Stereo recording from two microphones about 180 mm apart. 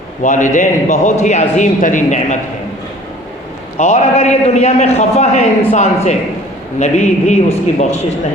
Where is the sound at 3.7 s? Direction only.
40° left (ahead or behind).